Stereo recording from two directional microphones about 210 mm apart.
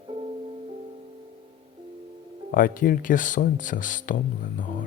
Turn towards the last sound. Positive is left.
turn(degrees=40)  # may be behind; listen again after turning